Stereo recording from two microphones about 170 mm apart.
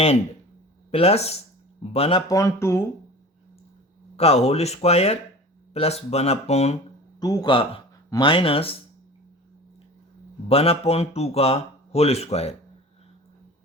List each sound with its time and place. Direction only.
0.9 s speech: 35° left (ahead or behind)
2.3 s speech: 20° left (ahead or behind)
4.2 s speech: 35° left (ahead or behind)
7.2 s a man's voice: 20° left (ahead or behind)
10.5 s speech: 35° left (ahead or behind)